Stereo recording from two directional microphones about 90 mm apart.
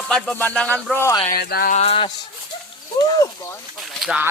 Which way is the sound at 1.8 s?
90° left.